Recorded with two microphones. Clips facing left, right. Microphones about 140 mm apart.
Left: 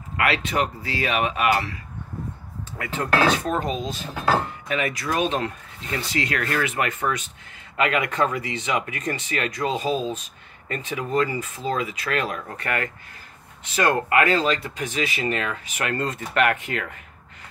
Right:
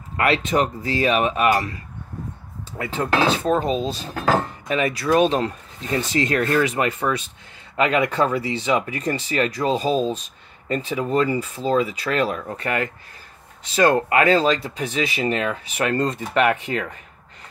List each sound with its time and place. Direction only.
0.6 s speech: 35° right (ahead or behind)
2.8 s speech: 30° right (ahead or behind)